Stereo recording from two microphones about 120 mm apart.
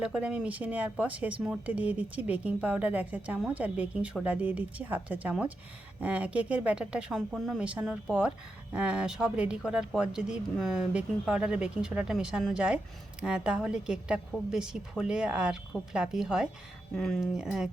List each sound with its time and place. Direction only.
0.0 s speech: 10° right (ahead or behind)